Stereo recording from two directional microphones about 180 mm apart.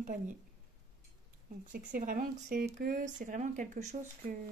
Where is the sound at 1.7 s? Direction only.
45° right (ahead or behind).